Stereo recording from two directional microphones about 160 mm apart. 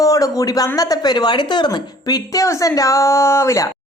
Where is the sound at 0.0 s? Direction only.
20° left (ahead or behind).